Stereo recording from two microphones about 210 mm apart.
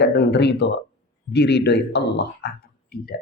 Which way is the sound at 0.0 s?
55° left (ahead or behind).